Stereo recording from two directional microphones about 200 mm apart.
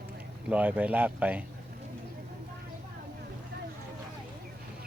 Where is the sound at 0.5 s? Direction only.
10° right (ahead or behind).